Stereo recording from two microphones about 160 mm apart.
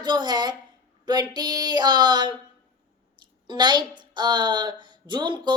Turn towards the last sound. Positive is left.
turn(degrees=-30)  # may be behind; listen again after turning